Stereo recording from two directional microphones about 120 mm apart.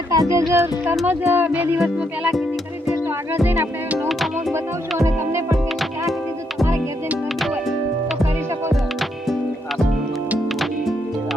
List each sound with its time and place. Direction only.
0.1 s speech: 30° right (ahead or behind)
1.0 s music: 15° right (ahead or behind)
3.3 s music: 20° right (ahead or behind)
8.7 s music: centre (ahead or behind)